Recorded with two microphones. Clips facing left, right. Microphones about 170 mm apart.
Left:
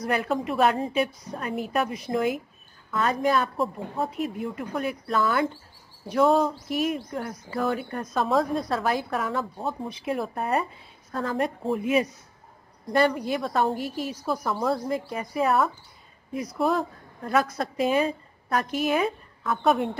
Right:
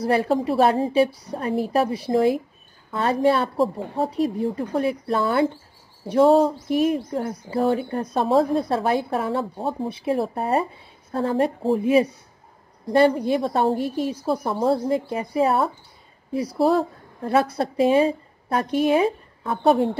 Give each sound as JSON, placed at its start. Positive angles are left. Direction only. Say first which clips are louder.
{"t": 0.0, "sound": "a woman's voice", "louder": "right 6 dB", "side_deg": -30}